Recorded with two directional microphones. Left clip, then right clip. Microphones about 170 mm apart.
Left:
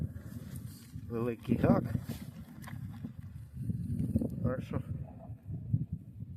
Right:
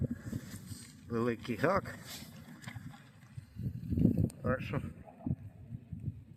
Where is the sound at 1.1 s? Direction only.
10° left (ahead or behind).